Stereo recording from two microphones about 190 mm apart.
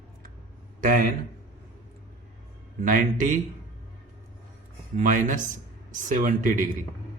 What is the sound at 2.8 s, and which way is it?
Speech, 45° right (ahead or behind).